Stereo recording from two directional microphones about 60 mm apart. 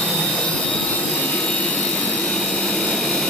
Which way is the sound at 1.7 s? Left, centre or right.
Centre.